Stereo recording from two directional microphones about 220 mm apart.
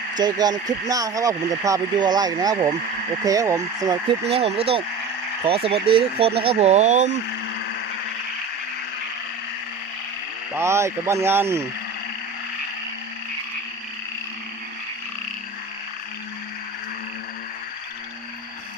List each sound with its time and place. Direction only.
0.2 s speech: 20° right (ahead or behind)
4.3 s speech: 25° right (ahead or behind)
10.5 s speech: 10° right (ahead or behind)